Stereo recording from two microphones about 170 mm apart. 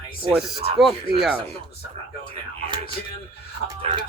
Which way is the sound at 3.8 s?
25° right (ahead or behind).